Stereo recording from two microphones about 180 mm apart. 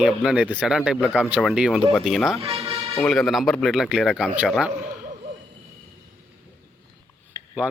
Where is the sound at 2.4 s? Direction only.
30° right (ahead or behind).